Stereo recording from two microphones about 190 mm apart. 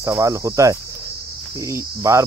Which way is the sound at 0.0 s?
15° right (ahead or behind).